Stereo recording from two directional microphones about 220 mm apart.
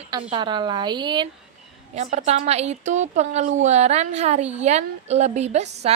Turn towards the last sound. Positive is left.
turn(degrees=-30)  # may be behind; listen again after turning